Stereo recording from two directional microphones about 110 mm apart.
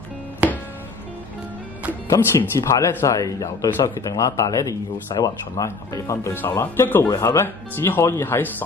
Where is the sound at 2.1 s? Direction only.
30° left (ahead or behind).